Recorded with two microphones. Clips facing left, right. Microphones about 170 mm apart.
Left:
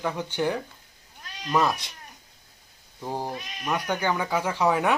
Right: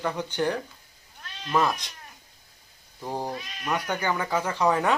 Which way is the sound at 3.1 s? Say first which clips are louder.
Even; 15° left (ahead or behind).